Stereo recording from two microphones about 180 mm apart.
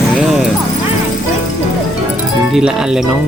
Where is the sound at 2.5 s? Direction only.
5° right (ahead or behind).